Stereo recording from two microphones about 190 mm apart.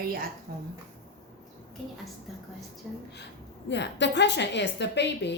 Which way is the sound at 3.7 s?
65° left (ahead or behind).